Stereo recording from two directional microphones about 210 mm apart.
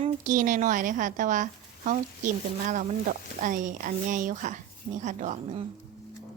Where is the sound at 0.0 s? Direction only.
35° right (ahead or behind).